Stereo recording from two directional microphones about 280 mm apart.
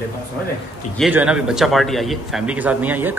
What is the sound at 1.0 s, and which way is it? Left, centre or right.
A man's voice, centre.